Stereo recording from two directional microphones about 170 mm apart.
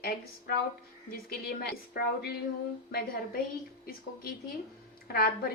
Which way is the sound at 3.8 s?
60° left (ahead or behind).